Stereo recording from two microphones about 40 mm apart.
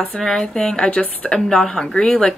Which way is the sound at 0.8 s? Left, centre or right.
Left.